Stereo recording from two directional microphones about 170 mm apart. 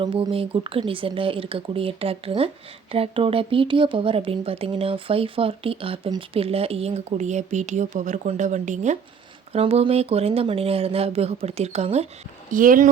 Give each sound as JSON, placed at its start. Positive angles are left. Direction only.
{"t": 0.0, "sound": "speech", "side_deg": -30}
{"t": 12.5, "sound": "speech", "side_deg": -50}